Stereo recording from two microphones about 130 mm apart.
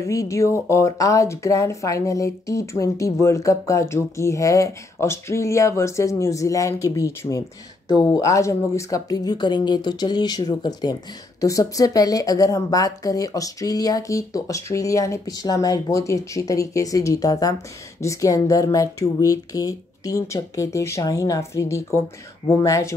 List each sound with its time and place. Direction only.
0.0 s a woman's voice: 25° left (ahead or behind)